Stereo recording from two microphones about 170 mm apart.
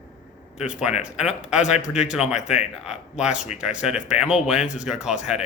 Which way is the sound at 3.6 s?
5° right (ahead or behind).